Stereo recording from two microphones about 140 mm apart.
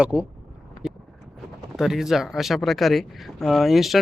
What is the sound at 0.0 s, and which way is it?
Speech, 5° right (ahead or behind).